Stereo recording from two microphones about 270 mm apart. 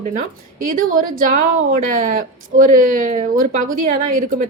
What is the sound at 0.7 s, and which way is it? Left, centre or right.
A woman's voice, right.